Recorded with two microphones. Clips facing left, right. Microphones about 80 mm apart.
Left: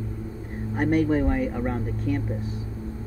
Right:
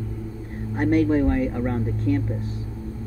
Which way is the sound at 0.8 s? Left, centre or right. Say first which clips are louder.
Right 3 dB; centre.